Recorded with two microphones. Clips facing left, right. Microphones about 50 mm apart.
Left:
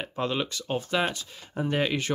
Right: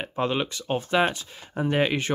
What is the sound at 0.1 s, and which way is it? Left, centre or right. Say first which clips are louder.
Speech: right 3 dB; right.